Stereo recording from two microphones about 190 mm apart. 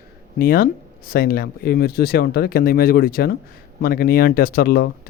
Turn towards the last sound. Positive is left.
turn(degrees=55)  # may be behind; listen again after turning